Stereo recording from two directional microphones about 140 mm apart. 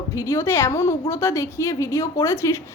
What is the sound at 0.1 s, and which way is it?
A woman's voice, 20° left (ahead or behind).